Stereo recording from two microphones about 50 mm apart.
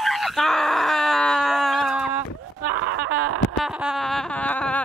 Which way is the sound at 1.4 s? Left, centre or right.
Centre.